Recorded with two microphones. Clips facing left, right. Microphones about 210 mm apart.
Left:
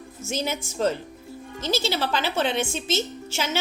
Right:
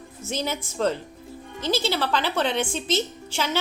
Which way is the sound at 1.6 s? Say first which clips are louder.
Right 1 dB; 5° left (ahead or behind).